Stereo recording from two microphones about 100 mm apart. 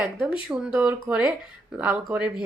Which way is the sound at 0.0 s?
15° right (ahead or behind).